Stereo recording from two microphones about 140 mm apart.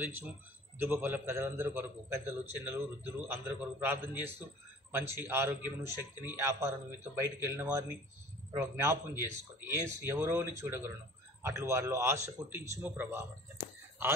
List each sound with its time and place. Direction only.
0.7 s a man's voice: 15° right (ahead or behind)